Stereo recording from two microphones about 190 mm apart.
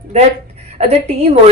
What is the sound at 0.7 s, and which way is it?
Speech, 35° right (ahead or behind).